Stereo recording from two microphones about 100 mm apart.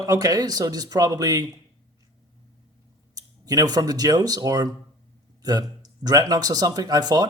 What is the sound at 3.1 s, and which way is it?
Speech, 40° right (ahead or behind).